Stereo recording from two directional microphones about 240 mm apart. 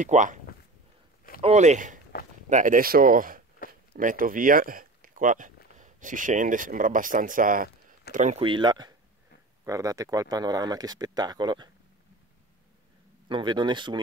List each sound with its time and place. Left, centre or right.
0.0 s speech: right
1.4 s speech: right
13.3 s speech: centre